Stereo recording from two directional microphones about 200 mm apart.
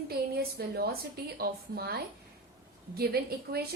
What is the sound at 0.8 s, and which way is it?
A woman's voice, 50° right (ahead or behind).